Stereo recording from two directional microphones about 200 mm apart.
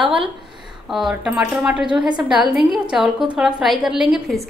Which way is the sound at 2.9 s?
Centre (ahead or behind).